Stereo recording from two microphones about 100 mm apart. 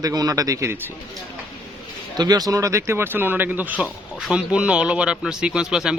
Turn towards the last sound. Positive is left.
turn(degrees=-5)  # may be behind; listen again after turning